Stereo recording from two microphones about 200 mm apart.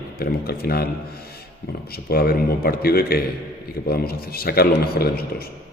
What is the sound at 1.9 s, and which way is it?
A man's voice, 50° left (ahead or behind).